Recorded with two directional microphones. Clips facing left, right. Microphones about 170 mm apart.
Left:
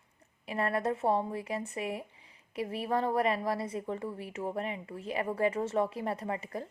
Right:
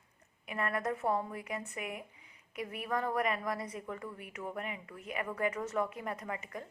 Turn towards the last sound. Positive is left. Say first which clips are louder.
# left 5 dB
turn(degrees=30)  # may be behind; listen again after turning